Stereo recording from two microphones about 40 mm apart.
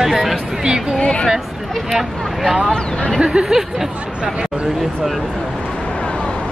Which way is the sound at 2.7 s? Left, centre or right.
Centre.